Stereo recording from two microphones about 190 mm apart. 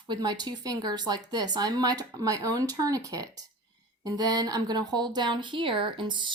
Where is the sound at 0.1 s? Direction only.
20° right (ahead or behind).